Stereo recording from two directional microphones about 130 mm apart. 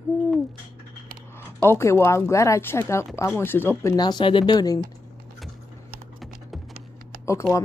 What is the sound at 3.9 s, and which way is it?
Speech, 35° left (ahead or behind).